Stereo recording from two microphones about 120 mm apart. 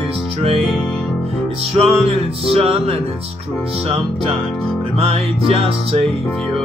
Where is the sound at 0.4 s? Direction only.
50° right (ahead or behind).